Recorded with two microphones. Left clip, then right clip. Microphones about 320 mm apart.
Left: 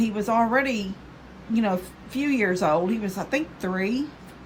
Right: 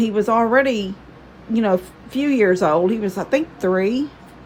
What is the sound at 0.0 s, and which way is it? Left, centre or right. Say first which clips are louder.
Speech: right 6 dB; right.